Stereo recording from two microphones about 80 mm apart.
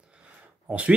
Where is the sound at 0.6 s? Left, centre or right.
Centre.